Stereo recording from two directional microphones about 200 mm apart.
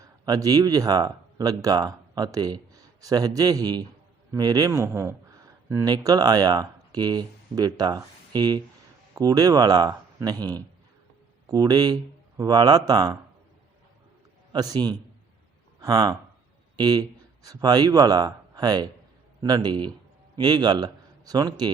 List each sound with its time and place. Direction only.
0.0 s a man's voice: 20° right (ahead or behind)
14.5 s speech: 20° right (ahead or behind)